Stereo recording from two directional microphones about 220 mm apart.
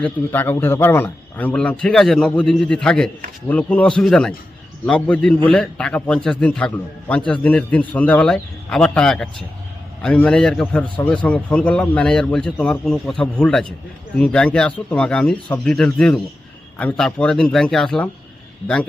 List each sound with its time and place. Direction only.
0.0 s a man's voice: 10° left (ahead or behind)